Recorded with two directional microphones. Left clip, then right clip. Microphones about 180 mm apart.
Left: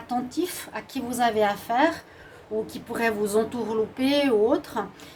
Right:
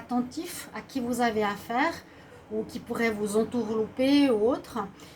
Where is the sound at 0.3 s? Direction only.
45° left (ahead or behind).